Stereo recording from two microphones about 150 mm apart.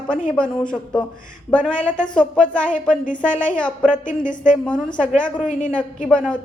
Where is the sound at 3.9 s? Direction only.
60° left (ahead or behind).